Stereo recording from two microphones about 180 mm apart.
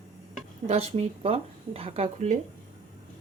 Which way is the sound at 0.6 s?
35° right (ahead or behind).